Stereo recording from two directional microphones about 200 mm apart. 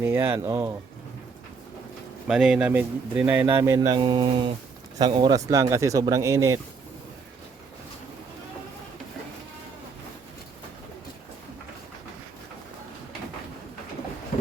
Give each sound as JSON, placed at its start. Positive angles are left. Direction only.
{"t": 0.0, "sound": "speech", "side_deg": -10}
{"t": 2.2, "sound": "speech", "side_deg": -5}